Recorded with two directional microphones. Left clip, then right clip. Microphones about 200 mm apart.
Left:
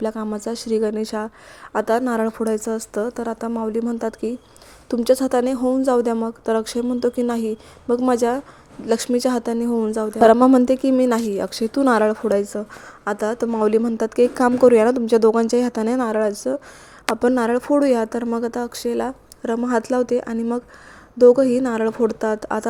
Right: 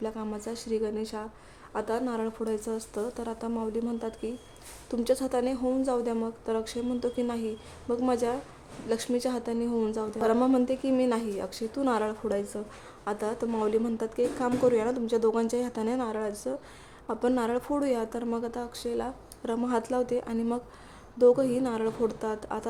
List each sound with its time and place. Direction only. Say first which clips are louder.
0.0 s a woman's voice: left 10 dB; 35° left (ahead or behind)
19.4 s a woman's voice: left 8 dB; 25° left (ahead or behind)